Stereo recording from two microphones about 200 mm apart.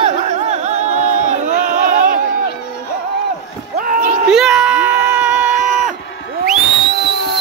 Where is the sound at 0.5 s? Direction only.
35° right (ahead or behind).